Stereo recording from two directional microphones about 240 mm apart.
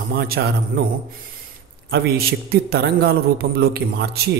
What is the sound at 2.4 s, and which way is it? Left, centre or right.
Speech, right.